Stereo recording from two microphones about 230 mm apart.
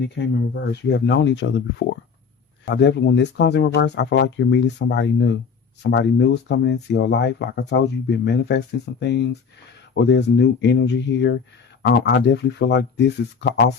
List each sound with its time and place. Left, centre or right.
0.0 s speech: left